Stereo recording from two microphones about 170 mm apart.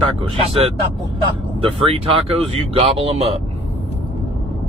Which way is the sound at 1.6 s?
30° right (ahead or behind).